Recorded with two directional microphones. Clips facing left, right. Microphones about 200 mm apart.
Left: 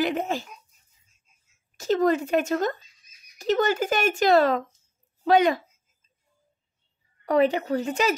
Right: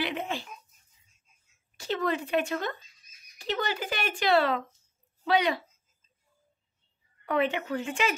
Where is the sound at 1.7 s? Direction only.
45° left (ahead or behind).